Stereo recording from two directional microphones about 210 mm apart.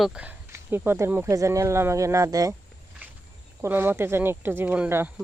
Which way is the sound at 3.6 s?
10° right (ahead or behind).